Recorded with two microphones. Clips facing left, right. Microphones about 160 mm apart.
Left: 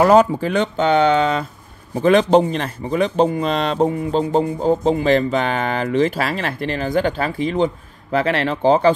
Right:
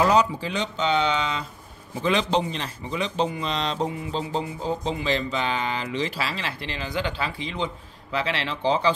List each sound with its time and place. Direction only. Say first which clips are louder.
0.0 s a man's voice: left 7 dB; 50° left (ahead or behind)